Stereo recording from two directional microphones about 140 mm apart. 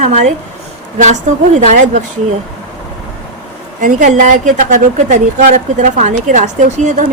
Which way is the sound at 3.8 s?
65° right (ahead or behind).